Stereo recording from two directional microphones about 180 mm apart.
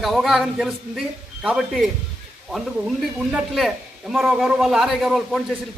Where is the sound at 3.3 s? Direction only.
Centre (ahead or behind).